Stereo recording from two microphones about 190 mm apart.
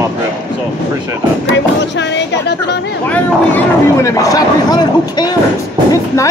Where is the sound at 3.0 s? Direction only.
10° left (ahead or behind).